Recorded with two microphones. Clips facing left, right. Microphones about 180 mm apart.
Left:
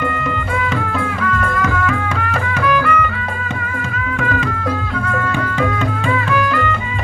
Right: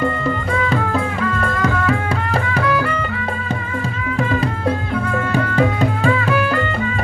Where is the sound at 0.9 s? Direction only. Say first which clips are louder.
Even; 30° right (ahead or behind).